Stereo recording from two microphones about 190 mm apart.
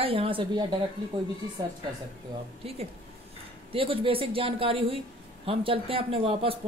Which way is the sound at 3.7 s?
30° right (ahead or behind).